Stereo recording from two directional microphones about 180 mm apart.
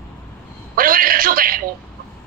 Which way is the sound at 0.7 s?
50° right (ahead or behind).